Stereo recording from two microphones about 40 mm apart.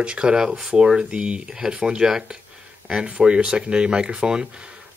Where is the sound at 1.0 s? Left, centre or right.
Right.